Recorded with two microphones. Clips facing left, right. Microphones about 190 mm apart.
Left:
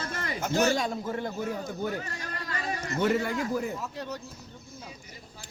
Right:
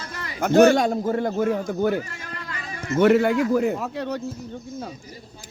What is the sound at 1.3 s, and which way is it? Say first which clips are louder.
Speech: right 10 dB; 70° right (ahead or behind).